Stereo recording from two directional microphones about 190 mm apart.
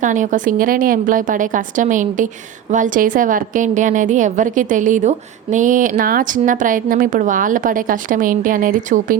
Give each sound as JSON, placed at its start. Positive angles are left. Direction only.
{"t": 0.0, "sound": "a woman's voice", "side_deg": -40}